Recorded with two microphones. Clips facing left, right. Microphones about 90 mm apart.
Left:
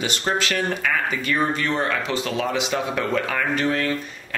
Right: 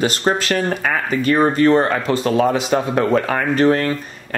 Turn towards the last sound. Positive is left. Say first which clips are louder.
# right 7 dB
turn(degrees=-45)  # may be behind; listen again after turning